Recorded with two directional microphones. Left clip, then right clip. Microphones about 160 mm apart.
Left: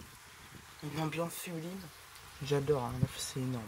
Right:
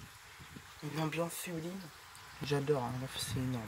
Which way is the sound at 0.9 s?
5° left (ahead or behind).